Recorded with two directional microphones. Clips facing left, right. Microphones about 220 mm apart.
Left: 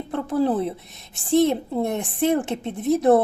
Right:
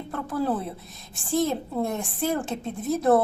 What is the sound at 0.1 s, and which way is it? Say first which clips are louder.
A woman's voice: left 5 dB; 20° left (ahead or behind).